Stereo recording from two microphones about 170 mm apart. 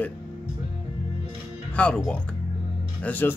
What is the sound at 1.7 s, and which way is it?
Speech, 5° left (ahead or behind).